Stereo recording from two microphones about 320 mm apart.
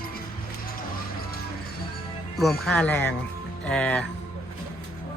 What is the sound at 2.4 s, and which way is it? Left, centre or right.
A man's voice, centre.